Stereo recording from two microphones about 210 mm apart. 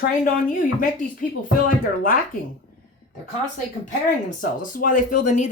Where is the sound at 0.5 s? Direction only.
40° left (ahead or behind).